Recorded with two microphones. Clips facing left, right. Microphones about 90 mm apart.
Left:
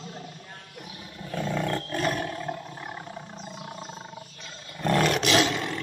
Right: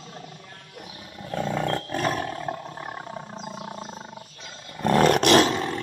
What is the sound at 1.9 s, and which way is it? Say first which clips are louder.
Roar: right 2 dB; 20° right (ahead or behind).